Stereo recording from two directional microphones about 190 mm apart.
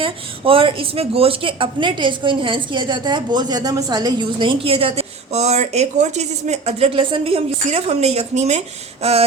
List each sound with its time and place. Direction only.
0.0 s speech: 30° right (ahead or behind)